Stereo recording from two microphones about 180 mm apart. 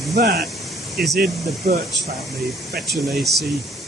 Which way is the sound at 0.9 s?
Centre (ahead or behind).